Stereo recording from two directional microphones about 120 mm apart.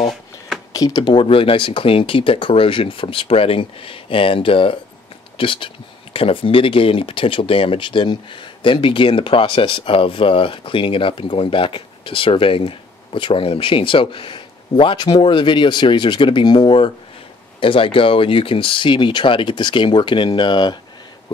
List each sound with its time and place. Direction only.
0.7 s speech: 35° left (ahead or behind)